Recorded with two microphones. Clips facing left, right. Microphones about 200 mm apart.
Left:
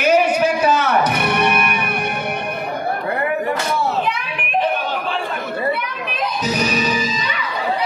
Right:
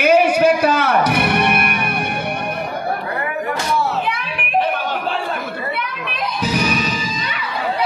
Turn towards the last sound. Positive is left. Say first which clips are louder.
# right 1 dB
turn(degrees=-55)  # may be behind; listen again after turning